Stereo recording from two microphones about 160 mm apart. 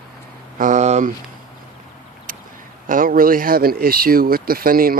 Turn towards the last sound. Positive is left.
turn(degrees=-65)  # may be behind; listen again after turning